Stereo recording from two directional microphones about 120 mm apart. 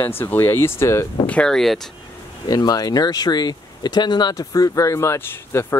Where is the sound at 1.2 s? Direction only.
10° left (ahead or behind).